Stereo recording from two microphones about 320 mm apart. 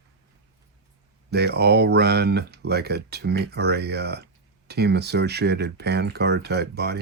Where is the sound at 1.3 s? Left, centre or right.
Right.